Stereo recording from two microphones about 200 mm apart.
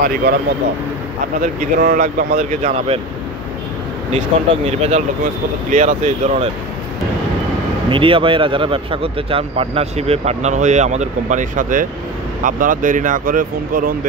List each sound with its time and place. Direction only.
0.0 s speech: 45° right (ahead or behind)
1.4 s speech: 45° right (ahead or behind)
4.6 s speech: 30° right (ahead or behind)
7.9 s speech: 25° right (ahead or behind); by 13.9 s 45° right (ahead or behind)